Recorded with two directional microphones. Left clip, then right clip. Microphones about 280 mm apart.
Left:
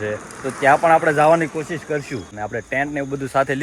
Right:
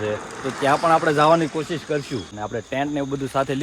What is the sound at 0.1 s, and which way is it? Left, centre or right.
Speech, right.